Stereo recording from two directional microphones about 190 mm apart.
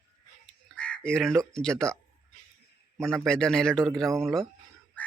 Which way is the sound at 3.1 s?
Centre (ahead or behind).